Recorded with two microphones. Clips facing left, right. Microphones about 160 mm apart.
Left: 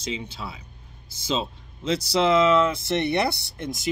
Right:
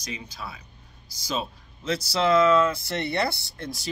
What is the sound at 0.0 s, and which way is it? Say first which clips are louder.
Speech: left 5 dB; 25° left (ahead or behind).